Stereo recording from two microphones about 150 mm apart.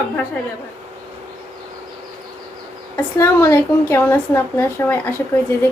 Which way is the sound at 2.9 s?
15° left (ahead or behind).